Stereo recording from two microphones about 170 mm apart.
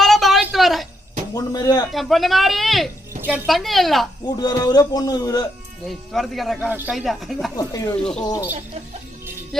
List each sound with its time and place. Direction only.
0.0 s a sound: centre (ahead or behind)
1.3 s a sound: 20° left (ahead or behind)
1.9 s speech: centre (ahead or behind)
4.4 s a man's voice: 25° left (ahead or behind)
5.9 s speech: centre (ahead or behind)
7.5 s a man's voice: 20° left (ahead or behind)